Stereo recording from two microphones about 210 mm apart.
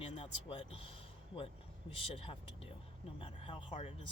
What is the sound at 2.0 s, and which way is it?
Speech, 25° left (ahead or behind).